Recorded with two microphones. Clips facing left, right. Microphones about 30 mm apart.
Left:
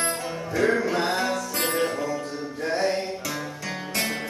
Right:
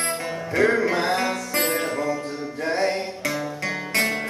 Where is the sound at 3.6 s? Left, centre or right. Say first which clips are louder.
Right 5 dB; right.